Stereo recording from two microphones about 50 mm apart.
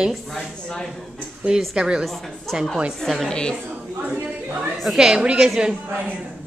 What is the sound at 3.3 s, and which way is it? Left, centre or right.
Speech, centre.